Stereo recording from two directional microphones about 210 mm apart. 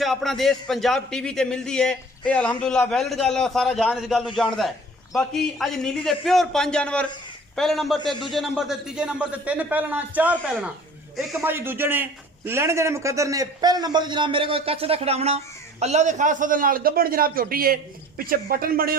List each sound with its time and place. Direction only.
0.0 s a man's voice: centre (ahead or behind); by 18.9 s 45° right (ahead or behind)